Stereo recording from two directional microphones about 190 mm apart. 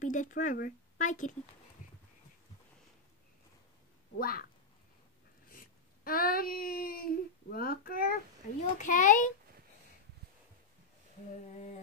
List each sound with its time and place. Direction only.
0.0 s a sound: 40° left (ahead or behind)
4.2 s speech: 55° left (ahead or behind)
5.5 s a child's voice: 50° left (ahead or behind)
11.4 s a child's voice: 40° left (ahead or behind)